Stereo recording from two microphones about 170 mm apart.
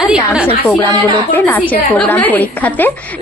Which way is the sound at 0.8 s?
15° left (ahead or behind).